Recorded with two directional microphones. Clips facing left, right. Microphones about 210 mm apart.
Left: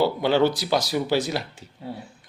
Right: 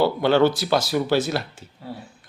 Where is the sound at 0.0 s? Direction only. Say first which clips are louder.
Right 2 dB; 15° left (ahead or behind).